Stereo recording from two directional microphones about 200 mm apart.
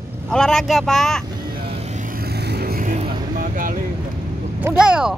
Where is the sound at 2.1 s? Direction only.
50° right (ahead or behind).